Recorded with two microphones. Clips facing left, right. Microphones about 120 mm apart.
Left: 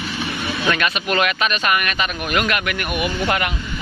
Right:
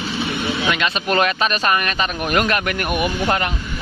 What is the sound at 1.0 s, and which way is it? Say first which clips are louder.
Speech: right 3 dB; 35° right (ahead or behind).